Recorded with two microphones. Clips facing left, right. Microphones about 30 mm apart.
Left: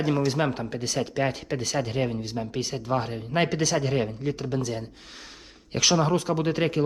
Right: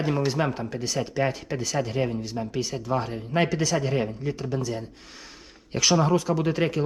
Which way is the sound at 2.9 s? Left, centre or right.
Centre.